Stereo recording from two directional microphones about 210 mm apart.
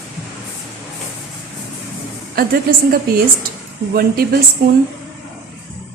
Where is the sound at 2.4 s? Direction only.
45° right (ahead or behind).